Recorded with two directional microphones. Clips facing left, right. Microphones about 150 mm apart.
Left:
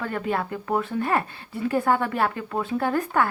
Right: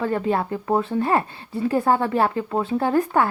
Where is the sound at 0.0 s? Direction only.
30° right (ahead or behind).